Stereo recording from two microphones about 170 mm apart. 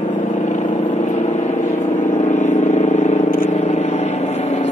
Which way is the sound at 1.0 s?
45° left (ahead or behind).